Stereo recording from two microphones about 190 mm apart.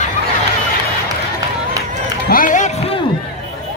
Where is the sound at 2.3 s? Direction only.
45° left (ahead or behind).